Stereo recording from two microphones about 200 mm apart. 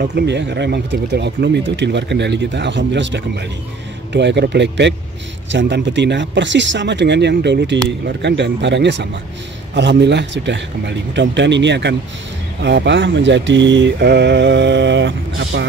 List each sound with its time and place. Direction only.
0.0 s speech: 60° right (ahead or behind)